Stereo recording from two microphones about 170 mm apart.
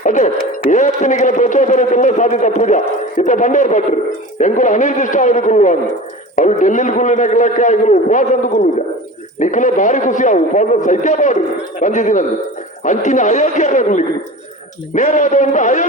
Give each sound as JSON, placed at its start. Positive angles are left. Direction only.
{"t": 0.0, "sound": "a man's voice", "side_deg": 50}